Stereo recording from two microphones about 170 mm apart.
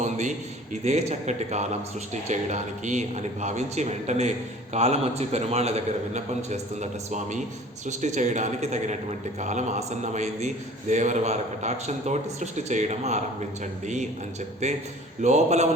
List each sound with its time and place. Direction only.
0.0 s a man's voice: 45° right (ahead or behind)